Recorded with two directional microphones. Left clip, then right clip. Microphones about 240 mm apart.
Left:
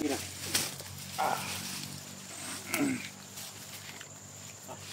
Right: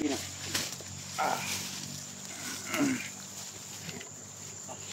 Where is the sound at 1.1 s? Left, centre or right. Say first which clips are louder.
Even; centre.